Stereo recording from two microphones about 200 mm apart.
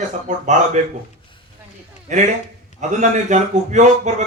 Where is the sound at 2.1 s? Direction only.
35° right (ahead or behind).